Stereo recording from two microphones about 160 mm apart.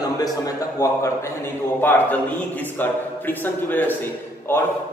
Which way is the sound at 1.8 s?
10° left (ahead or behind).